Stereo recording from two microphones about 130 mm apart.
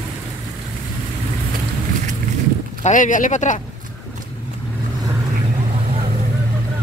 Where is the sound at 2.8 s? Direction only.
80° left.